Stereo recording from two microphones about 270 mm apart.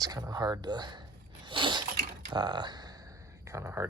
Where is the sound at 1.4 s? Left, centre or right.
Centre.